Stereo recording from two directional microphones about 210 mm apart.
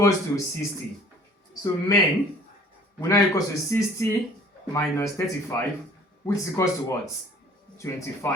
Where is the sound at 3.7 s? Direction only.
15° left (ahead or behind).